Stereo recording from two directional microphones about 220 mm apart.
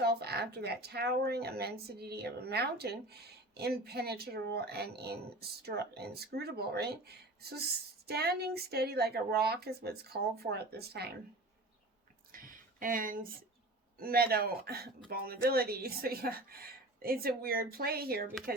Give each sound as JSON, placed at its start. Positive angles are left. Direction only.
{"t": 0.0, "sound": "speech", "side_deg": -45}
{"t": 8.0, "sound": "speech", "side_deg": -45}
{"t": 12.3, "sound": "a sound", "side_deg": -40}
{"t": 14.0, "sound": "speech", "side_deg": -45}